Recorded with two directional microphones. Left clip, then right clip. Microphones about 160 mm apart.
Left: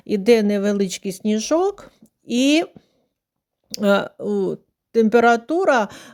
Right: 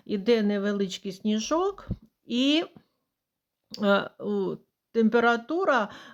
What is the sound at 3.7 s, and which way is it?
Speech, 45° left (ahead or behind).